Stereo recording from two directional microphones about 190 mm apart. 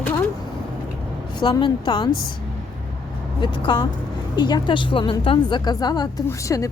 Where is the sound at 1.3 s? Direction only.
25° left (ahead or behind).